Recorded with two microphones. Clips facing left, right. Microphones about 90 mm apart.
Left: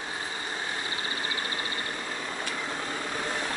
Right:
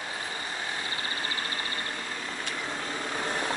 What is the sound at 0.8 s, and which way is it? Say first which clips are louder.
Vehicle: left 1 dB; 25° left (ahead or behind).